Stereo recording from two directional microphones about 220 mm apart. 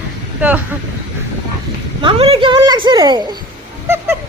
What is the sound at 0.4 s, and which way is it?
Speech, 10° right (ahead or behind).